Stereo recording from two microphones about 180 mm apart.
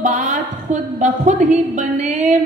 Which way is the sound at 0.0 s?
45° right (ahead or behind).